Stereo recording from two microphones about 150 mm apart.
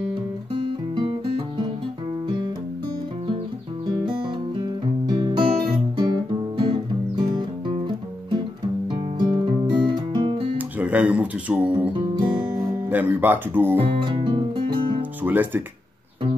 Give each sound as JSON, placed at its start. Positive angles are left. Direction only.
{"t": 5.0, "sound": "music", "side_deg": -30}
{"t": 8.9, "sound": "music", "side_deg": -30}
{"t": 10.8, "sound": "speech", "side_deg": -10}
{"t": 13.7, "sound": "music", "side_deg": -35}
{"t": 15.2, "sound": "speech", "side_deg": -10}